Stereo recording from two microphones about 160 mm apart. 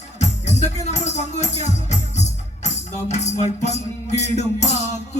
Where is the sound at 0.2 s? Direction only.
45° left (ahead or behind).